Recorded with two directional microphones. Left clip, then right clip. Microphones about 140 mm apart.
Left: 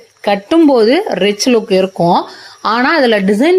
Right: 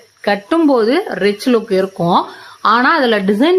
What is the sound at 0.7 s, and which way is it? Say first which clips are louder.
A woman's voice: left 3 dB; 20° left (ahead or behind).